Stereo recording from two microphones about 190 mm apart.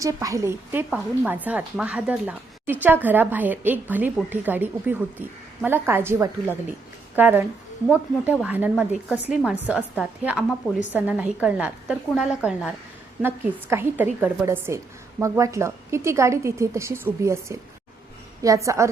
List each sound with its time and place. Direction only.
0.0 s a woman's voice: 15° right (ahead or behind)